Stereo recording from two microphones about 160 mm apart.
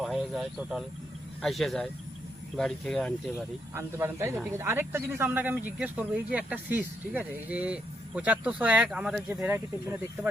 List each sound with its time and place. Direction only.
0.0 s speech: centre (ahead or behind)
3.8 s speech: 15° right (ahead or behind)